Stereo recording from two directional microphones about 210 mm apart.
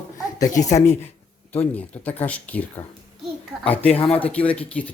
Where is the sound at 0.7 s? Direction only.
35° left (ahead or behind).